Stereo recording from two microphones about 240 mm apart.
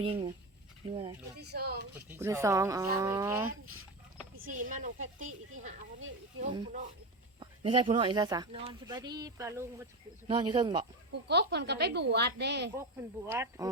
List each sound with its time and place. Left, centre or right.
0.0 s speech: centre
1.4 s speech: right
2.0 s speech: centre
4.5 s speech: right
7.3 s speech: right
11.1 s speech: right
12.7 s speech: centre